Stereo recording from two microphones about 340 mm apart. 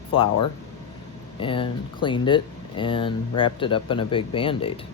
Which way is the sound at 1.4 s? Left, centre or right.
Centre.